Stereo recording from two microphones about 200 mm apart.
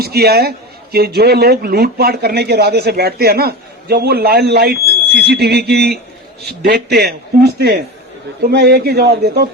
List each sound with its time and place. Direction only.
0.0 s a man's voice: 50° right (ahead or behind)